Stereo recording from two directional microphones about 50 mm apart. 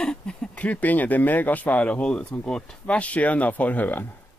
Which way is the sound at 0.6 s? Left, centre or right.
Left.